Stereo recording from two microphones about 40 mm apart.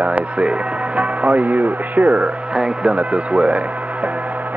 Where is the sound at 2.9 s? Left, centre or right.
Right.